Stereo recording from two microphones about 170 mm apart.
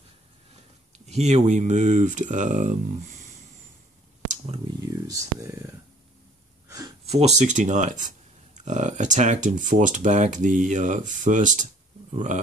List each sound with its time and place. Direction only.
0.9 s speech: 40° right (ahead or behind)
5.0 s speech: 20° right (ahead or behind)
7.1 s speech: 40° right (ahead or behind)